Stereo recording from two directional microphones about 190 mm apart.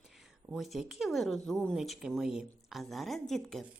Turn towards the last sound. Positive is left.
turn(degrees=0)  # may be behind; listen again after turning